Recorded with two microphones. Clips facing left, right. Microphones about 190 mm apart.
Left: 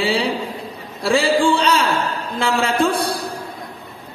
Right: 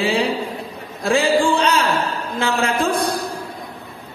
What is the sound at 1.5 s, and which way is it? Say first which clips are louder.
A man's voice: even; 35° left (ahead or behind).